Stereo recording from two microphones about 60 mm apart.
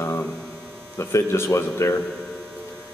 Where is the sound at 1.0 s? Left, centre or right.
Left.